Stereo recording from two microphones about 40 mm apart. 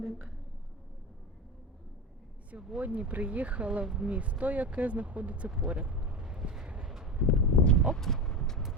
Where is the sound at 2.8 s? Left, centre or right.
Right.